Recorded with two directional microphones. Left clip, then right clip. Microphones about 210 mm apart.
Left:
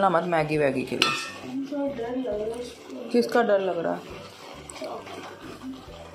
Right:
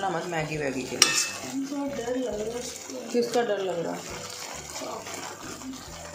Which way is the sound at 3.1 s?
15° left (ahead or behind).